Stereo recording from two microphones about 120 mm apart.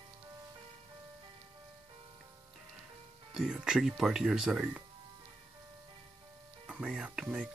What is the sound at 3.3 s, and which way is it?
Speech, 5° right (ahead or behind).